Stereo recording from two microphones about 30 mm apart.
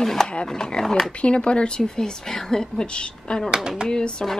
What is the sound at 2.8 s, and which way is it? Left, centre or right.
A woman's voice, left.